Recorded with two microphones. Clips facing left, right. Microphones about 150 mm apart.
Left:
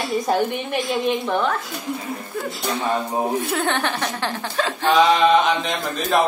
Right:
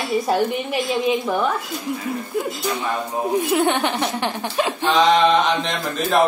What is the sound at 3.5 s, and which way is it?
Speech, 15° right (ahead or behind).